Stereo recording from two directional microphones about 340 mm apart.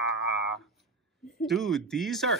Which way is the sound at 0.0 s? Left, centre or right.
Left.